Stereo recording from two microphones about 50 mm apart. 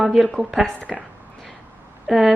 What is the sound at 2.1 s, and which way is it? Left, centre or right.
Speech, centre.